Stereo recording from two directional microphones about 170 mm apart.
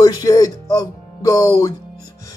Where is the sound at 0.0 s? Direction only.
20° left (ahead or behind).